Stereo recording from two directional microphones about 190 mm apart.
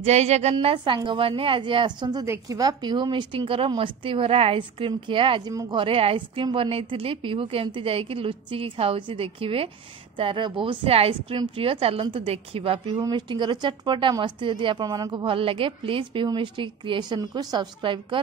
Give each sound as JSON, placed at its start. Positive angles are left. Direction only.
{"t": 0.0, "sound": "a woman's voice", "side_deg": -35}